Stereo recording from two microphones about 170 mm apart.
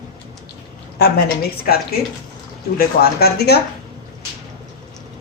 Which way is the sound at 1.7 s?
60° left (ahead or behind).